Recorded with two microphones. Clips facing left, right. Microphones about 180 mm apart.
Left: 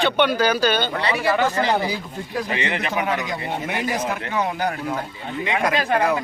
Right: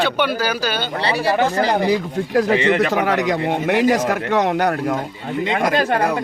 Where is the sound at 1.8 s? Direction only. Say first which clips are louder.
Right 9 dB; 75° right (ahead or behind).